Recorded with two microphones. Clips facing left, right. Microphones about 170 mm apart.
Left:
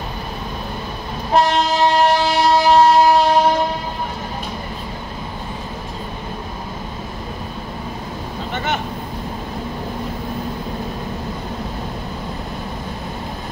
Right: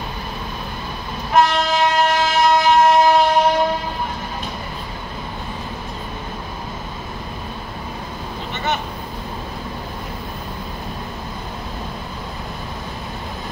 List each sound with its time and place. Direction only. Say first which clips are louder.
1.3 s train: left 1 dB; 35° left (ahead or behind)